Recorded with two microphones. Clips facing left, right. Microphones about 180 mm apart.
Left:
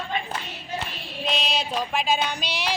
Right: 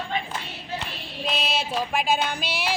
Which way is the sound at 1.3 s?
5° right (ahead or behind).